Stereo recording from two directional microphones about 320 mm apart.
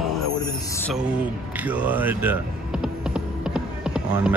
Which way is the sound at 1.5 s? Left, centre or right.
Centre.